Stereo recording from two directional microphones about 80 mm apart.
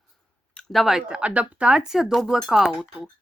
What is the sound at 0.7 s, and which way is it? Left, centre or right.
Speech, centre.